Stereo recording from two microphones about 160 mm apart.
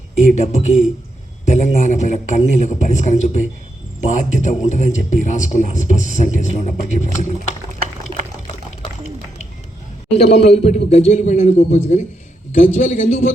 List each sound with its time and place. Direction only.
0.3 s a man's voice: 45° left (ahead or behind)
10.2 s a man's voice: 45° left (ahead or behind)